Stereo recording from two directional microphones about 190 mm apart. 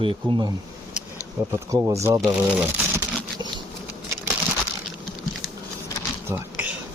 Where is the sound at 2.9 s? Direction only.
20° right (ahead or behind).